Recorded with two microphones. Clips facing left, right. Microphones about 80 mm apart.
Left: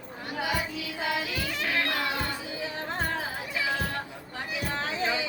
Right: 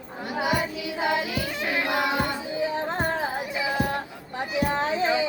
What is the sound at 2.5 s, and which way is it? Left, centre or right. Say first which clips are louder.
Music: right 8 dB; right.